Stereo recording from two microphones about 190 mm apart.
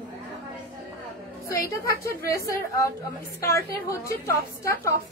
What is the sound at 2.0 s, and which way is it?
A woman's voice, 15° left (ahead or behind).